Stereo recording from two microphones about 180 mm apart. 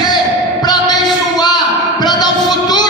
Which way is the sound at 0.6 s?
25° left (ahead or behind).